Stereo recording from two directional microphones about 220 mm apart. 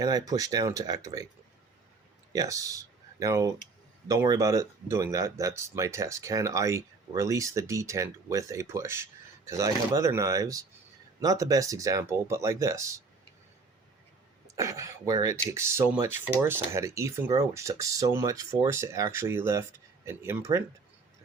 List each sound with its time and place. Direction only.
0.0 s speech: 15° right (ahead or behind)
2.3 s speech: 15° right (ahead or behind)
14.4 s speech: 15° right (ahead or behind)